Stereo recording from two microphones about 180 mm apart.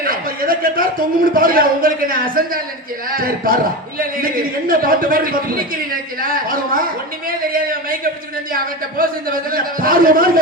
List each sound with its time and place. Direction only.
0.0 s a man's voice: 50° right (ahead or behind)